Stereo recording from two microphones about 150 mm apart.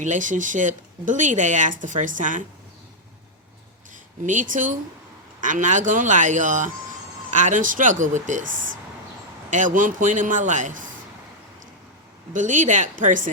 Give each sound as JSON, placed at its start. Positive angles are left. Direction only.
{"t": 0.0, "sound": "speech", "side_deg": -55}
{"t": 4.2, "sound": "speech", "side_deg": -55}
{"t": 12.3, "sound": "speech", "side_deg": -55}